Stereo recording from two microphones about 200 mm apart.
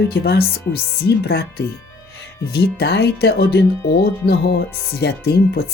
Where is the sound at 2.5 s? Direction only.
55° left (ahead or behind).